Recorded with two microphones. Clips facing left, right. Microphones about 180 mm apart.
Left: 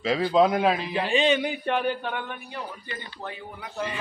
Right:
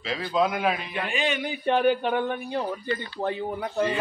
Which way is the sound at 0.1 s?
30° left (ahead or behind).